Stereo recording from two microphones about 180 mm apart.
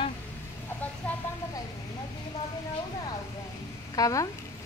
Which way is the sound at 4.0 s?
20° left (ahead or behind).